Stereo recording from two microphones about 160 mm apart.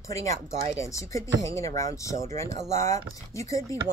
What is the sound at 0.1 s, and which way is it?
Speech, 20° left (ahead or behind).